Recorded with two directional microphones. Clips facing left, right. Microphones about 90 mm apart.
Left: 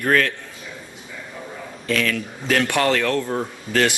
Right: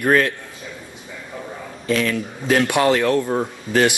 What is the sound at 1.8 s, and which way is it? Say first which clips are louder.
Speech: right 2 dB; 20° right (ahead or behind).